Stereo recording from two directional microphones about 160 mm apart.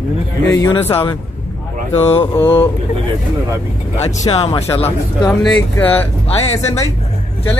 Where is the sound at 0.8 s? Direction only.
15° left (ahead or behind).